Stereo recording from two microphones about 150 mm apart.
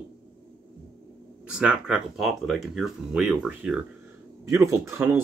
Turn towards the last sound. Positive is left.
turn(degrees=-15)  # may be behind; listen again after turning